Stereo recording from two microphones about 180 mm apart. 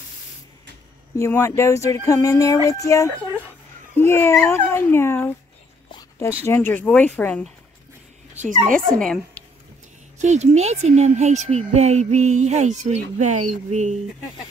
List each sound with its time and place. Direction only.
1.1 s speech: 15° left (ahead or behind)
5.9 s dog: 20° left (ahead or behind)
6.4 s speech: 10° left (ahead or behind)
8.4 s speech: 45° right (ahead or behind)
10.1 s speech: 40° right (ahead or behind)